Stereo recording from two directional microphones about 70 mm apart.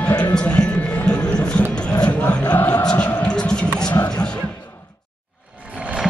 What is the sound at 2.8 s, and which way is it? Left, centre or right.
Music, centre.